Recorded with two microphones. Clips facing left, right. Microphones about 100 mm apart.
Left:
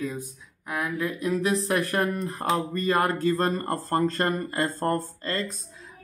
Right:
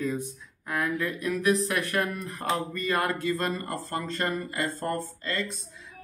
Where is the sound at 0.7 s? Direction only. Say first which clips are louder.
Even; 15° left (ahead or behind).